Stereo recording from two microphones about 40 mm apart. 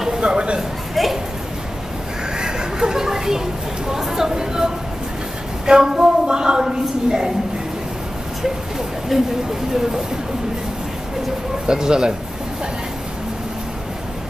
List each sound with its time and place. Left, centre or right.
0.2 s speech: right
0.6 s a sound: centre
2.3 s a sound: centre
5.7 s a woman's voice: centre
9.1 s speech: centre
11.6 s a woman's voice: centre